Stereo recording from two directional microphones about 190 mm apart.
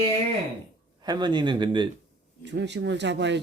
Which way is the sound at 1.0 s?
25° right (ahead or behind).